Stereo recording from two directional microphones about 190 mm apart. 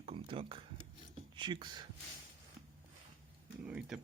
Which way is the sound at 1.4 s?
25° right (ahead or behind).